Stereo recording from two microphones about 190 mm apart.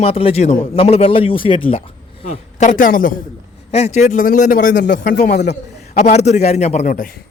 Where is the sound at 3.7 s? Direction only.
35° left (ahead or behind).